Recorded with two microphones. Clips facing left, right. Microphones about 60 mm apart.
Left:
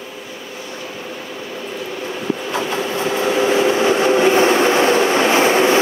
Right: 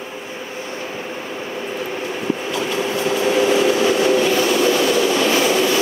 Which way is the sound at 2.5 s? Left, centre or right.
Left.